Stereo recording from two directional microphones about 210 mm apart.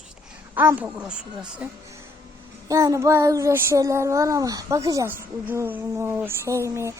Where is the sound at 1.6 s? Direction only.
5° right (ahead or behind).